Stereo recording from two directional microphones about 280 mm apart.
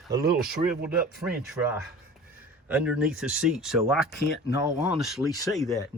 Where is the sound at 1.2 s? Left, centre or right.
Centre.